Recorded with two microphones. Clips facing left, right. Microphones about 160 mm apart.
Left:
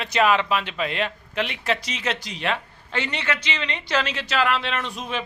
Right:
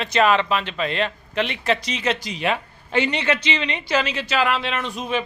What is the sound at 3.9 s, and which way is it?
A man's voice, 5° right (ahead or behind).